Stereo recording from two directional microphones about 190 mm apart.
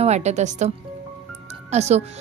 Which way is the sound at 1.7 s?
35° right (ahead or behind).